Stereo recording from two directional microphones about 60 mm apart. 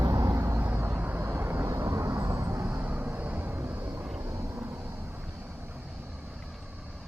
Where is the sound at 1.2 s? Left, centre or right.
Right.